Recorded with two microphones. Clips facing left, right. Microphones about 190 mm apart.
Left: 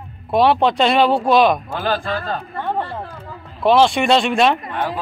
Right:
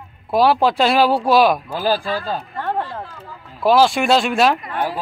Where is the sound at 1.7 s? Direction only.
35° right (ahead or behind).